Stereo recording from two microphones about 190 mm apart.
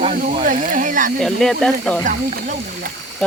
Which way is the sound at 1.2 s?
5° left (ahead or behind).